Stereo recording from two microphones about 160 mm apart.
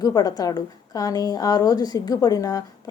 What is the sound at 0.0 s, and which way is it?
Speech, 25° left (ahead or behind).